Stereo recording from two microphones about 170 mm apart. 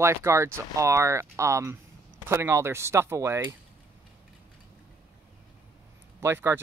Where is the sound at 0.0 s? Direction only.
15° right (ahead or behind).